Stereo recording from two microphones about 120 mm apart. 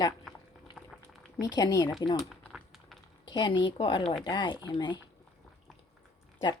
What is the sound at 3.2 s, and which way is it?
A woman's voice, 40° left (ahead or behind).